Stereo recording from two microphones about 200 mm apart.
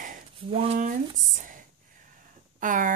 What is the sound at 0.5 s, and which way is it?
Speech, 30° right (ahead or behind).